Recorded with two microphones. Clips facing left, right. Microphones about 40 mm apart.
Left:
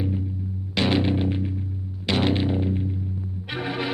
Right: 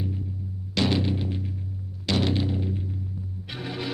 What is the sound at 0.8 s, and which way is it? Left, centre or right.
Music, left.